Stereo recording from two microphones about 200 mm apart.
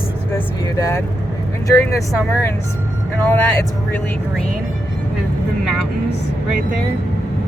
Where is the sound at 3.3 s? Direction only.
10° left (ahead or behind).